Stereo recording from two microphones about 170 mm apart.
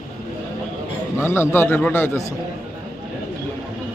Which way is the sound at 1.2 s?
15° left (ahead or behind).